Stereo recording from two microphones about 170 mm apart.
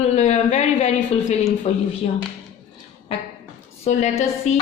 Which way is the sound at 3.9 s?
45° left (ahead or behind).